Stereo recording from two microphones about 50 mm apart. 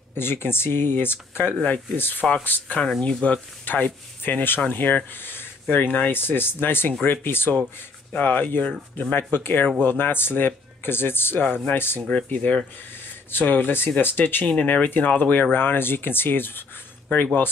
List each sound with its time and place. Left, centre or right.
0.2 s speech: left
3.0 s speech: centre
3.3 s speech: left
12.3 s speech: left